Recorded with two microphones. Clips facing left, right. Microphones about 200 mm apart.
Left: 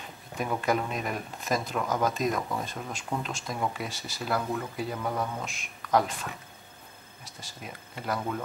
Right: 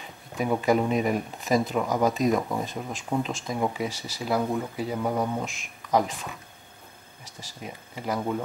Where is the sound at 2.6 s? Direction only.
Centre (ahead or behind).